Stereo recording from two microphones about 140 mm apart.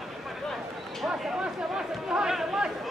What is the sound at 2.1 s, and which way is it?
Chatter, 5° right (ahead or behind).